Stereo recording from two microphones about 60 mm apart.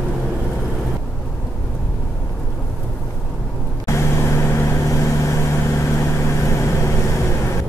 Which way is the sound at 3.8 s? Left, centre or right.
Left.